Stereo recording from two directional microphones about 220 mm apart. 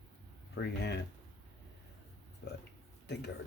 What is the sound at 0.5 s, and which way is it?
Speech, 50° left (ahead or behind).